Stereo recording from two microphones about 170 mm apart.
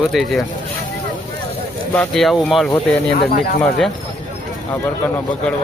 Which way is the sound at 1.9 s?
5° left (ahead or behind).